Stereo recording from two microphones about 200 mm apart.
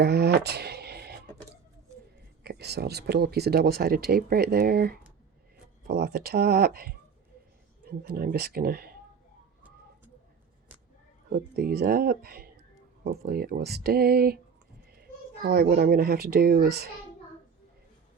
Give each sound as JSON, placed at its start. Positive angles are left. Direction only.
{"t": 0.0, "sound": "a sound", "side_deg": -55}
{"t": 2.4, "sound": "speech", "side_deg": -55}
{"t": 11.3, "sound": "a woman's voice", "side_deg": -50}